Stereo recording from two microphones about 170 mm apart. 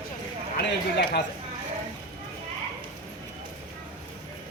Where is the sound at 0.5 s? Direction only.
75° left (ahead or behind).